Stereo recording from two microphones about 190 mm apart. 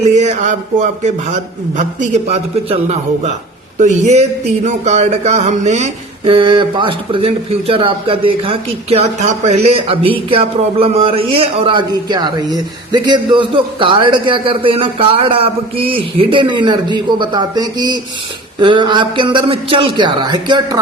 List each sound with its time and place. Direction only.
0.0 s speech: 40° right (ahead or behind); by 20.7 s 20° right (ahead or behind)